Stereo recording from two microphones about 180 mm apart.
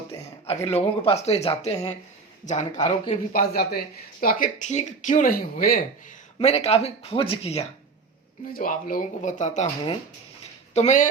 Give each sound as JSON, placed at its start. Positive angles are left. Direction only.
{"t": 0.1, "sound": "speech", "side_deg": 35}
{"t": 2.7, "sound": "speech", "side_deg": 25}
{"t": 3.3, "sound": "speech", "side_deg": 60}
{"t": 6.4, "sound": "speech", "side_deg": 35}
{"t": 8.5, "sound": "speech", "side_deg": 50}
{"t": 10.8, "sound": "speech", "side_deg": 40}